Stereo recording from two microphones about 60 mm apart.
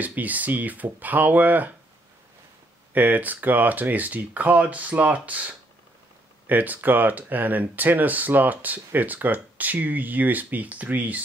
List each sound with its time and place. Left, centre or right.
0.0 s speech: right
2.9 s speech: right